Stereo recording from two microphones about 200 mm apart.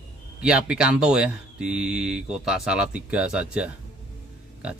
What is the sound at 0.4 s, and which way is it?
Speech, 5° right (ahead or behind).